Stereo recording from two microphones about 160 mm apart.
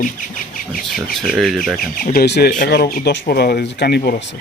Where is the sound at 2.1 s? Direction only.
85° left.